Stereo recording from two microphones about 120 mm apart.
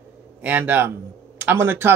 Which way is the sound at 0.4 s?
15° right (ahead or behind).